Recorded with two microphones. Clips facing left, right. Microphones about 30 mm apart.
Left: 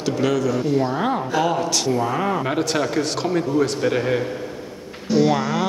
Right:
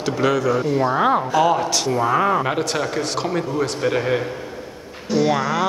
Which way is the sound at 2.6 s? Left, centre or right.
Centre.